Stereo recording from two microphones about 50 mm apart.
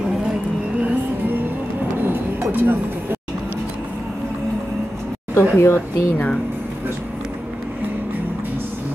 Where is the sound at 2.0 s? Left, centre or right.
Right.